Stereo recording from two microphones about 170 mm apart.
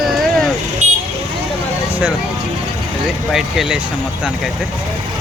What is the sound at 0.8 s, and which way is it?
Vehicle, 45° right (ahead or behind).